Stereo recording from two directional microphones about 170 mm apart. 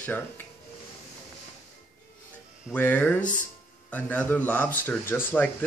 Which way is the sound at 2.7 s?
10° left (ahead or behind).